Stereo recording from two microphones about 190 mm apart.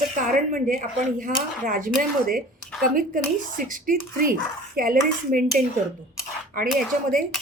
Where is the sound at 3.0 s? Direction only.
45° right (ahead or behind).